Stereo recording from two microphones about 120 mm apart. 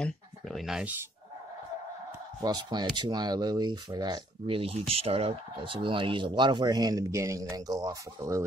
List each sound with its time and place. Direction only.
0.0 s a sound: centre (ahead or behind)
2.4 s speech: 35° right (ahead or behind)
4.6 s speech: 55° right (ahead or behind); by 8.5 s 25° right (ahead or behind)